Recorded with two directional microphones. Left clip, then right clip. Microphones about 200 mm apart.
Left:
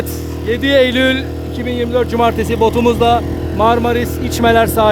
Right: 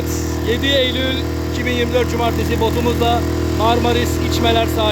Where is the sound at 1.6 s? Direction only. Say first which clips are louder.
Left 2 dB; 20° left (ahead or behind).